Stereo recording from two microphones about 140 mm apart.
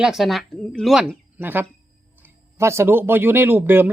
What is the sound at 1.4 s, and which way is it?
Speech, 15° right (ahead or behind).